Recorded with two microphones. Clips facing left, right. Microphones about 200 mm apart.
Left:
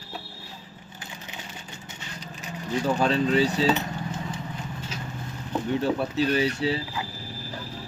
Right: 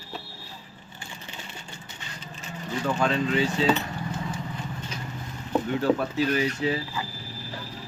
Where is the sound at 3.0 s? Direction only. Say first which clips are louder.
Left 2 dB; 35° left (ahead or behind).